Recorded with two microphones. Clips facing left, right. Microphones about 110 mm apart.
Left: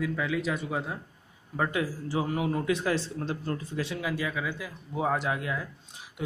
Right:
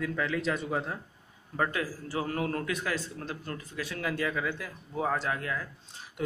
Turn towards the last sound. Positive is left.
turn(degrees=15)  # may be behind; listen again after turning